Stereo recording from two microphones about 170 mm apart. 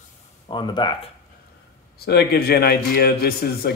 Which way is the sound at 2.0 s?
70° left (ahead or behind).